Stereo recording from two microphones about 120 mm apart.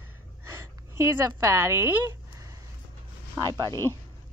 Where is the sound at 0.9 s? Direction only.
25° right (ahead or behind).